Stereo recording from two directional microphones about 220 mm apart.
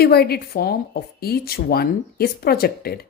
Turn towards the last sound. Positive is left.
turn(degrees=45)  # may be behind; listen again after turning